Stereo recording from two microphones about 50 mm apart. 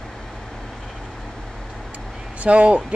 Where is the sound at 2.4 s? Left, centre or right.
Right.